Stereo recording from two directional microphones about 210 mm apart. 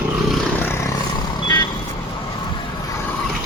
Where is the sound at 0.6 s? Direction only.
10° left (ahead or behind).